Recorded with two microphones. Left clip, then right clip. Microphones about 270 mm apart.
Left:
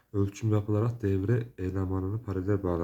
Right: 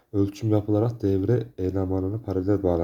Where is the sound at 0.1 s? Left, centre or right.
Centre.